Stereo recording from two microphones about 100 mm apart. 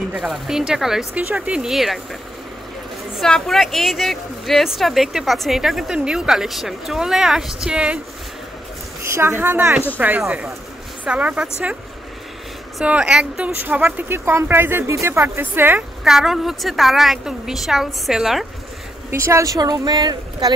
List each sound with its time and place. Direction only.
0.2 s a woman's voice: centre (ahead or behind)
3.2 s a woman's voice: 5° left (ahead or behind)
9.0 s speech: 25° right (ahead or behind)
10.2 s a woman's voice: 5° right (ahead or behind)
12.8 s speech: 10° right (ahead or behind)
16.0 s a woman's voice: 5° right (ahead or behind)
19.0 s speech: 25° right (ahead or behind); by 20.5 s 45° right (ahead or behind)